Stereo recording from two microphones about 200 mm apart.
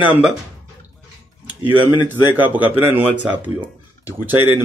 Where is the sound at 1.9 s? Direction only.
10° right (ahead or behind).